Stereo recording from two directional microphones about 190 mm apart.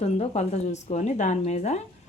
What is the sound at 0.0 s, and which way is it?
Speech, 35° left (ahead or behind).